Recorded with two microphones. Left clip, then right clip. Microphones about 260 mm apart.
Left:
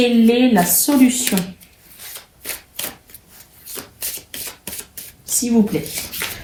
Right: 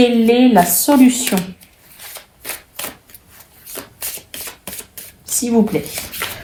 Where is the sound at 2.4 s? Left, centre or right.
Centre.